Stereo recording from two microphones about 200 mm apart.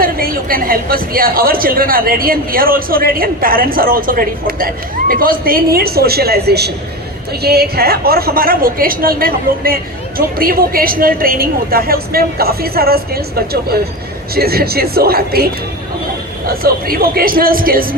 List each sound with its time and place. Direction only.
0.0 s a woman's voice: 45° right (ahead or behind)
16.5 s a woman's voice: 50° right (ahead or behind)